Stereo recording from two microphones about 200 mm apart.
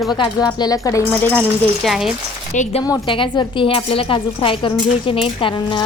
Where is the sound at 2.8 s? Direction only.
20° left (ahead or behind).